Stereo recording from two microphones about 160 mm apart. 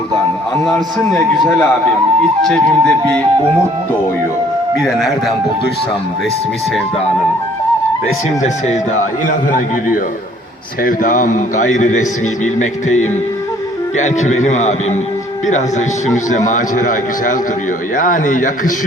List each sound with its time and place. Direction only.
0.6 s a man's voice: 5° left (ahead or behind)
8.4 s a man's voice: 45° left (ahead or behind)
10.8 s a man's voice: 55° left (ahead or behind)
16.1 s a man's voice: 50° left (ahead or behind)